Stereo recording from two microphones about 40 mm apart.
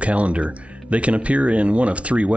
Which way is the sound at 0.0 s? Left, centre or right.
Right.